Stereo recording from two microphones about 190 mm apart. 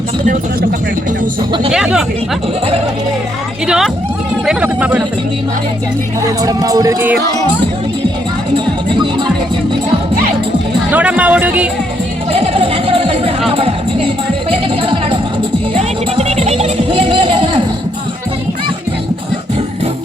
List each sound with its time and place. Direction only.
1.7 s speech: 5° right (ahead or behind)
3.7 s speech: centre (ahead or behind)
6.4 s music: 20° right (ahead or behind)
8.5 s speech: 25° right (ahead or behind)
10.9 s speech: 5° right (ahead or behind)
12.3 s a sound: 30° right (ahead or behind)
13.5 s music: 30° right (ahead or behind)
14.8 s music: 25° right (ahead or behind)